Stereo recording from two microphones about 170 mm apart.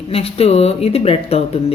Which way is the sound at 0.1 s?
35° left (ahead or behind).